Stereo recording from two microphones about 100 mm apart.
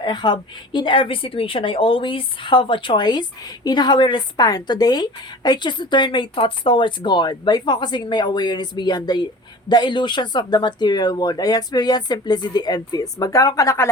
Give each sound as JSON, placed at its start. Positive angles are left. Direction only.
{"t": 0.0, "sound": "a woman's voice", "side_deg": 50}